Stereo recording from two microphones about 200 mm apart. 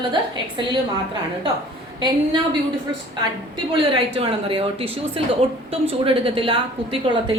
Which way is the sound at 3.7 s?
25° right (ahead or behind).